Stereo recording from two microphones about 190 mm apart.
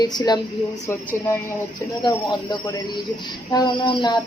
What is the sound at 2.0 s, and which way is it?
A woman's voice, 25° left (ahead or behind).